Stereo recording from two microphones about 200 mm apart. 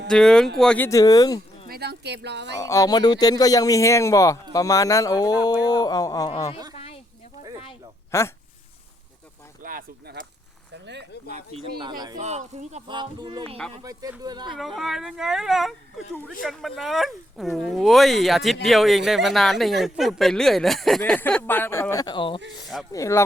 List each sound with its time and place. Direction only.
0.1 s speech: 5° left (ahead or behind)
0.9 s speech: 15° left (ahead or behind)
1.6 s speech: 50° right (ahead or behind)
2.6 s speech: 15° left (ahead or behind)
6.7 s a sound: 30° left (ahead or behind)
8.1 s speech: 15° left (ahead or behind)
9.6 s a sound: 45° right (ahead or behind)
11.3 s speech: 35° right (ahead or behind)
11.8 s speech: 20° right (ahead or behind)
12.2 s speech: 35° right (ahead or behind)
12.9 s speech: 25° right (ahead or behind)
14.5 s speech: centre (ahead or behind); by 23.2 s 15° left (ahead or behind)